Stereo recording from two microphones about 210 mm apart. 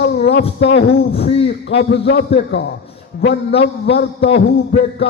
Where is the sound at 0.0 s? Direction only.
50° left (ahead or behind).